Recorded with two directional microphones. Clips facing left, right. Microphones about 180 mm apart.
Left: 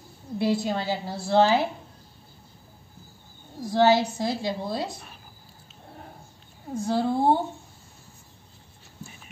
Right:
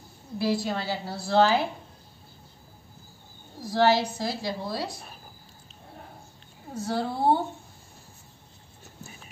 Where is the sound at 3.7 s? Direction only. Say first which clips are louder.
Left 2 dB; 20° left (ahead or behind).